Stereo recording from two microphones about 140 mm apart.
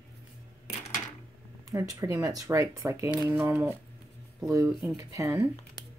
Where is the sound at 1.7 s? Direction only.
25° right (ahead or behind).